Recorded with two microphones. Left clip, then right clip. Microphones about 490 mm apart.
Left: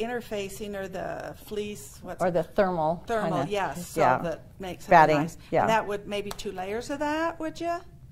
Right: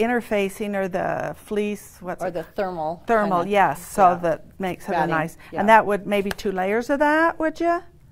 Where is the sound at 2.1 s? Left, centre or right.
Centre.